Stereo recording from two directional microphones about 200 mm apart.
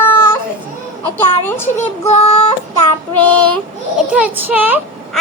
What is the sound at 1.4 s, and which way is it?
Speech, 10° left (ahead or behind).